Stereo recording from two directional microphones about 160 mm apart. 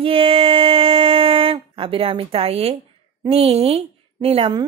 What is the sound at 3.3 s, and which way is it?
A woman's voice, 40° right (ahead or behind).